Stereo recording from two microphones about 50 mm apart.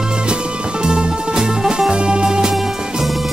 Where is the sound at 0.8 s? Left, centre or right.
Centre.